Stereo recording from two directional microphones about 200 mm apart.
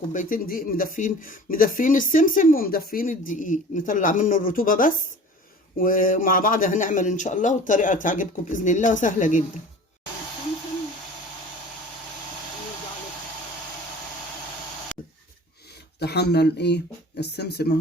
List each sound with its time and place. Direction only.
0.1 s a man's voice: 40° left (ahead or behind)
16.0 s speech: 55° left (ahead or behind)